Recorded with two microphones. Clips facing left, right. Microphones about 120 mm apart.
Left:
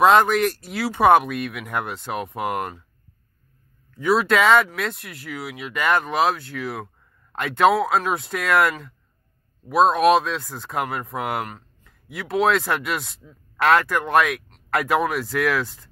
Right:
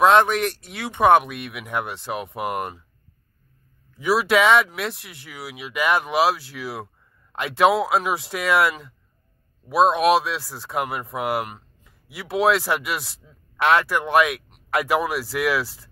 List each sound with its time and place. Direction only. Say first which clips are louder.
0.0 s speech: left 1 dB; centre (ahead or behind)
3.9 s speech: even; 5° right (ahead or behind)
11.4 s a sound: left 1 dB; 15° right (ahead or behind)
12.1 s speech: even; 5° right (ahead or behind)